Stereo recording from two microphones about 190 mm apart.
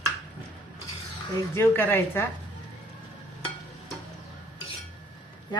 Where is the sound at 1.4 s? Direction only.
10° left (ahead or behind).